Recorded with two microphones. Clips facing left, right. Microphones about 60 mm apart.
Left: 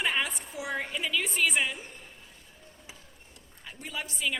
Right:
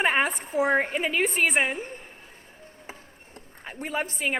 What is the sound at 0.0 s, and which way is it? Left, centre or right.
A man's voice, right.